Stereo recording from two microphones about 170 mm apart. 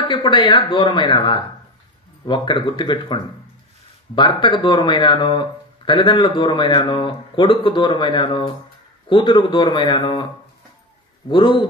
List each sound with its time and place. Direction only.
0.1 s speech: 25° left (ahead or behind)
11.2 s speech: 30° left (ahead or behind)